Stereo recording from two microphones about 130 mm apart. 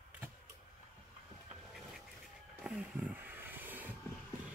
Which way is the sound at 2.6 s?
15° right (ahead or behind).